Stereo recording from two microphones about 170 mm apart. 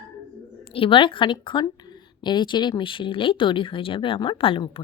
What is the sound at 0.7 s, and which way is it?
A woman's voice, 30° left (ahead or behind).